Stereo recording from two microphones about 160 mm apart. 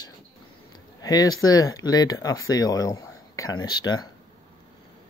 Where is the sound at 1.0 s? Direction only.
25° left (ahead or behind).